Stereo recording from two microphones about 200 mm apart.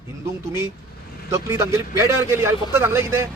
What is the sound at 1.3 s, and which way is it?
Speech, 15° right (ahead or behind).